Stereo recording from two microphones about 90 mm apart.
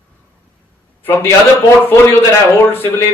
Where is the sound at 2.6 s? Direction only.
25° left (ahead or behind).